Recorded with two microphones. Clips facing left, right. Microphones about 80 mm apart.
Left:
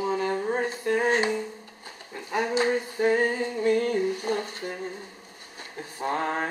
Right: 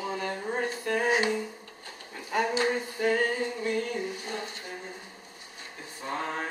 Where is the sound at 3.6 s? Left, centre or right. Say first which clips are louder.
Left 11 dB; left.